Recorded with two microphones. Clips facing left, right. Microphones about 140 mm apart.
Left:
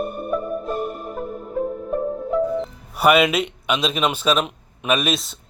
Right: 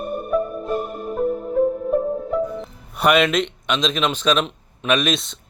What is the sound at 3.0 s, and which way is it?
Speech, 5° left (ahead or behind).